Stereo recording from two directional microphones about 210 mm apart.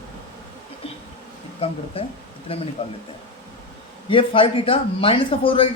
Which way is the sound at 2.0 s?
25° left (ahead or behind).